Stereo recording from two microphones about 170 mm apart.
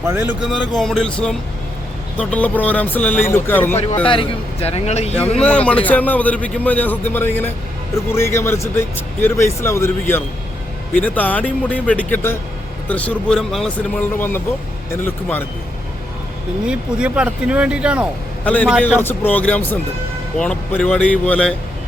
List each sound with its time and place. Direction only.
0.1 s speech: 10° right (ahead or behind)
0.4 s speech: centre (ahead or behind)
4.0 s a man's voice: 30° left (ahead or behind)
5.4 s speech: 5° left (ahead or behind)
16.6 s speech: 5° right (ahead or behind)
18.4 s speech: 10° left (ahead or behind)